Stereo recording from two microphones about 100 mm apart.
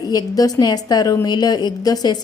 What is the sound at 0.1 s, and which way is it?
A woman's voice, 40° left (ahead or behind).